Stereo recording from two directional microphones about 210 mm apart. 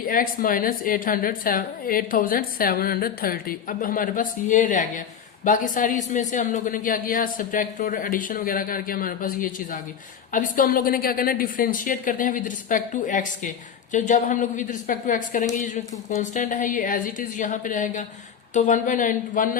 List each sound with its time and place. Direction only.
0.0 s a woman's voice: 40° left (ahead or behind)